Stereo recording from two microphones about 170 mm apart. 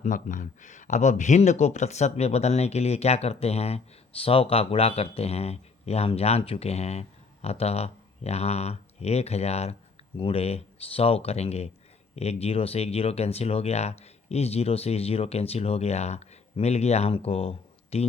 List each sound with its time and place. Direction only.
0.0 s speech: 50° left (ahead or behind)